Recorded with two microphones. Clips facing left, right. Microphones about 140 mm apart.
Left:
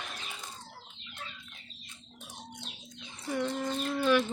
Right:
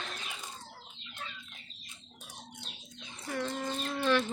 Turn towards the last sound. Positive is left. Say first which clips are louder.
# left 2 dB
turn(degrees=10)  # may be behind; listen again after turning